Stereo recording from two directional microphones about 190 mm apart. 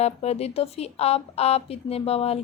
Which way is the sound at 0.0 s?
35° left (ahead or behind).